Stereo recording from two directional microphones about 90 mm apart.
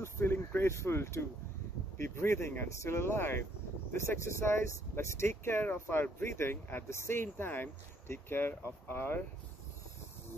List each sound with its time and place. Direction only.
0.0 s speech: 25° left (ahead or behind)